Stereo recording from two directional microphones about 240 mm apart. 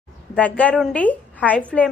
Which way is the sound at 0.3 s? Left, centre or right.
Centre.